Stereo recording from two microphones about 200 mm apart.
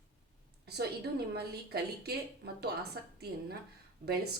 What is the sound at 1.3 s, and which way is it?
Speech, 50° right (ahead or behind).